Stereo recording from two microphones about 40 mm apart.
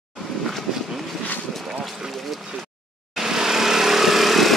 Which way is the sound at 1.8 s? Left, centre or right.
Centre.